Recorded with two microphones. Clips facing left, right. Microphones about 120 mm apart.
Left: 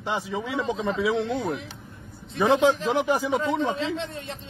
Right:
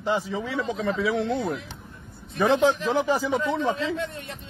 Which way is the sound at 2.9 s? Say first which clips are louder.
Even; 15° left (ahead or behind).